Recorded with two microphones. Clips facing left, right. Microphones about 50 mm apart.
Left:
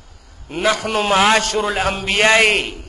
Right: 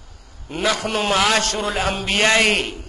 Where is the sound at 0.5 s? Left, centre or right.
Centre.